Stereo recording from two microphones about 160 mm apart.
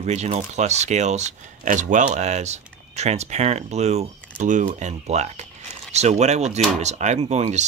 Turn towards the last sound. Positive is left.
turn(degrees=-45)  # may be behind; listen again after turning